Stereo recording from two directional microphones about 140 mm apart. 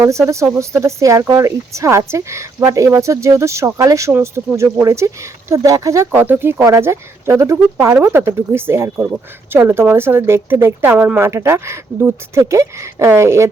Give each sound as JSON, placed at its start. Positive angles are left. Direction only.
{"t": 0.0, "sound": "speech", "side_deg": -20}